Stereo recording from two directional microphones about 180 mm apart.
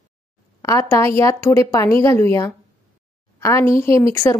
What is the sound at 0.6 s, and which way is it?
Speech, 15° left (ahead or behind).